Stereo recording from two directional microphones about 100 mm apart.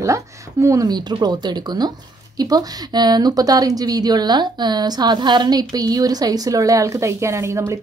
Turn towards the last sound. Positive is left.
turn(degrees=-30)  # may be behind; listen again after turning